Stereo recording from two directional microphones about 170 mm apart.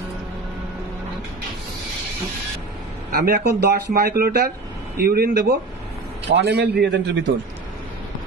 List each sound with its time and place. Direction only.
3.1 s speech: 60° right (ahead or behind)
6.2 s a man's voice: 80° right